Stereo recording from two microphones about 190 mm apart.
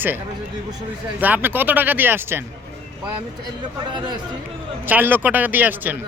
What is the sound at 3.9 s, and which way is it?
Speech, 25° right (ahead or behind).